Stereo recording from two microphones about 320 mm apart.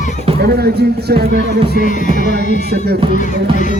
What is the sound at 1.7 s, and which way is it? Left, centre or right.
Music, left.